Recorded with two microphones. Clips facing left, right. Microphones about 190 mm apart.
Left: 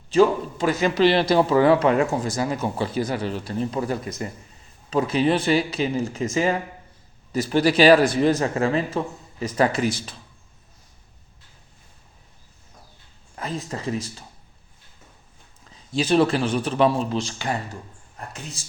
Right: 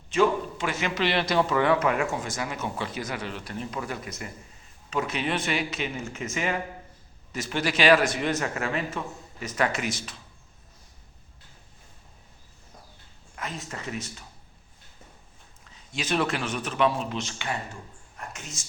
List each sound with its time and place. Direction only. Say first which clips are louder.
0.1 s a man's voice: left 5 dB; 35° left (ahead or behind)
13.3 s a man's voice: left 6 dB; 35° left (ahead or behind)
15.7 s a man's voice: left 9 dB; 35° left (ahead or behind)